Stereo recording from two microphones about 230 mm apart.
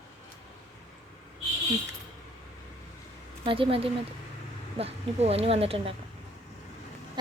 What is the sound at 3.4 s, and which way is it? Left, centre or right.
Speech, right.